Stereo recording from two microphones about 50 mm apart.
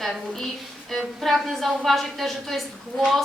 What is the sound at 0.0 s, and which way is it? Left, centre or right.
A woman's voice, centre.